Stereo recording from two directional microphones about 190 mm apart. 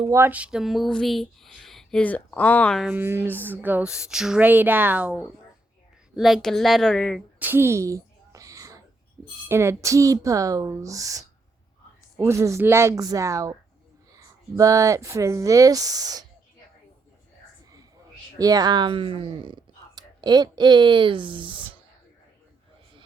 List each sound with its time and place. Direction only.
0.1 s speech: 10° right (ahead or behind)
2.9 s speech: 10° right (ahead or behind)
6.1 s speech: centre (ahead or behind)
7.3 s a sound: 10° right (ahead or behind)
9.5 s speech: 15° right (ahead or behind)
18.3 s speech: 20° right (ahead or behind)